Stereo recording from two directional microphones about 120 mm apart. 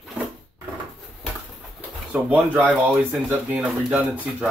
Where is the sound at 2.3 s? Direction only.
15° right (ahead or behind).